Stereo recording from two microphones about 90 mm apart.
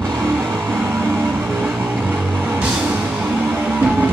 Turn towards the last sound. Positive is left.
turn(degrees=-20)  # may be behind; listen again after turning